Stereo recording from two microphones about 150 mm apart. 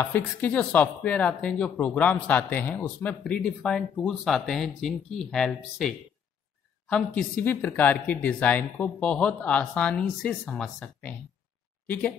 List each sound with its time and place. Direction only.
0.0 s speech: 15° left (ahead or behind)